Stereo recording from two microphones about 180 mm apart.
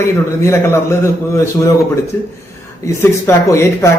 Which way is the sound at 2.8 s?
15° left (ahead or behind).